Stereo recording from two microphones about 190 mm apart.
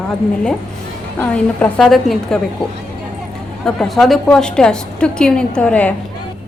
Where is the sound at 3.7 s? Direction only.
Centre (ahead or behind).